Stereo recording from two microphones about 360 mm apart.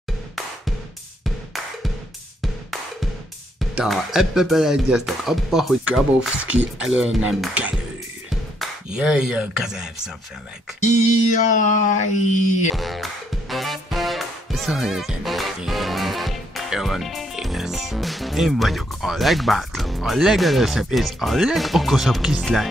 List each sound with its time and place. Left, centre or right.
2.4 s music: centre
3.7 s speech: centre
10.8 s a sound: centre
12.7 s speech: centre